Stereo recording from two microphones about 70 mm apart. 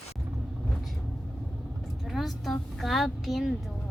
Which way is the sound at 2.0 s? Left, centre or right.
Centre.